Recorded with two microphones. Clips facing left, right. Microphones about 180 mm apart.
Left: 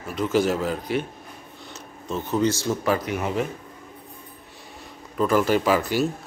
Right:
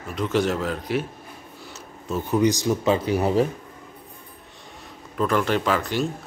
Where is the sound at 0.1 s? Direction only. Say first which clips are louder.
Left 1 dB; centre (ahead or behind); by 3.4 s 35° right (ahead or behind).